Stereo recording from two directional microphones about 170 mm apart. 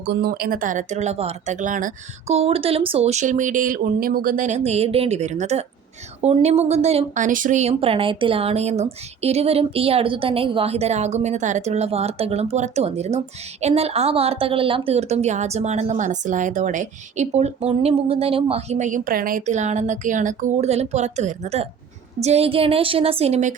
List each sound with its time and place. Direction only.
0.0 s speech: 70° right (ahead or behind); by 23.6 s 40° right (ahead or behind)